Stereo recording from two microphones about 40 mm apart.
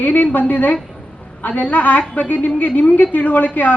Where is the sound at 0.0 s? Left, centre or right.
Left.